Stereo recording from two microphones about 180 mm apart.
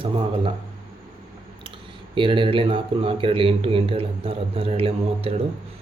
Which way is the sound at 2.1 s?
30° right (ahead or behind).